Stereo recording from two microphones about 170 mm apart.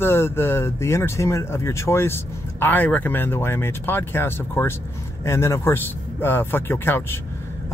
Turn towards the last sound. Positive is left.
turn(degrees=15)  # may be behind; listen again after turning